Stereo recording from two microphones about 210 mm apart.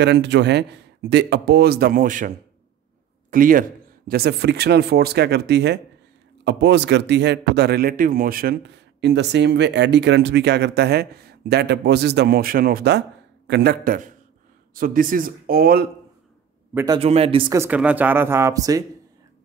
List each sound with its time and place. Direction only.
0.0 s a man's voice: 55° right (ahead or behind)
16.7 s speech: 15° right (ahead or behind)
17.0 s speech: 30° right (ahead or behind)